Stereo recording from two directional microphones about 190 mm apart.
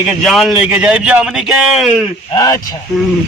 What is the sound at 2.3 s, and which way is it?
Speech, 20° left (ahead or behind).